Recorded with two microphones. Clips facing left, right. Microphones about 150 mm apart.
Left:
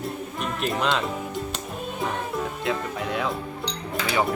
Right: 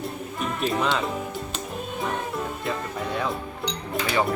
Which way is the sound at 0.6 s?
Centre (ahead or behind).